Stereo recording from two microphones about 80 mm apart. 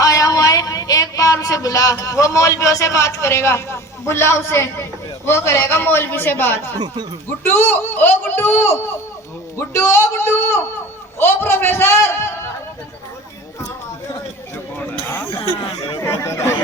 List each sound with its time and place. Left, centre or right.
0.0 s speech: left
6.7 s speech: right
7.3 s a man's voice: left
15.0 s a sound: left
16.0 s chatter: left